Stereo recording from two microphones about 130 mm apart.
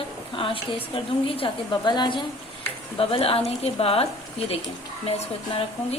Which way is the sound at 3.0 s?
45° left (ahead or behind).